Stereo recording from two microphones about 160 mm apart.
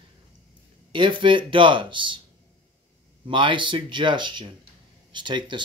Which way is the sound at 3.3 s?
30° right (ahead or behind).